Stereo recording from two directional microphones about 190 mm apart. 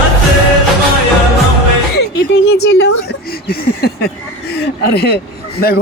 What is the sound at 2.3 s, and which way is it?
Speech, 65° left (ahead or behind).